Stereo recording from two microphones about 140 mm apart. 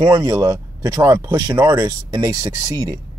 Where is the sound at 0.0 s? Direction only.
25° right (ahead or behind).